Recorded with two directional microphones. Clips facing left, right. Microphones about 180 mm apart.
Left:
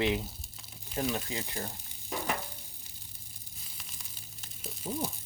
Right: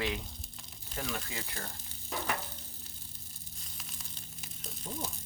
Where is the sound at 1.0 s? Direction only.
20° left (ahead or behind).